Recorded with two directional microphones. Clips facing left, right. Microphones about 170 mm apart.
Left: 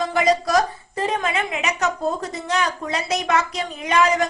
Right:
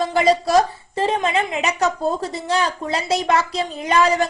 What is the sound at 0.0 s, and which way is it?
A woman's voice, 30° right (ahead or behind).